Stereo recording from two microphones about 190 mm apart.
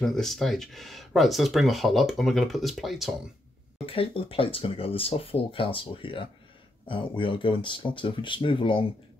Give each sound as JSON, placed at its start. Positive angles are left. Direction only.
{"t": 0.0, "sound": "speech", "side_deg": 0}
{"t": 3.7, "sound": "speech", "side_deg": 30}